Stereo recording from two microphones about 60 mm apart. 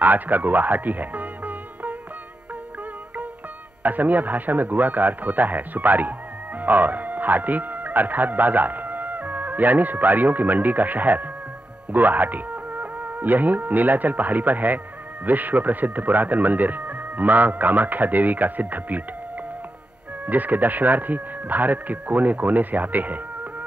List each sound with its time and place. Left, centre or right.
0.0 s music: right
3.8 s speech: right
20.2 s speech: right